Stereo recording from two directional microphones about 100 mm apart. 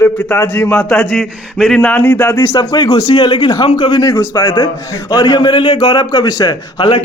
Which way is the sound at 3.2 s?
45° left (ahead or behind).